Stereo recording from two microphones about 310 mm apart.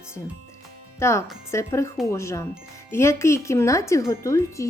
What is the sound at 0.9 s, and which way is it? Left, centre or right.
Speech, centre.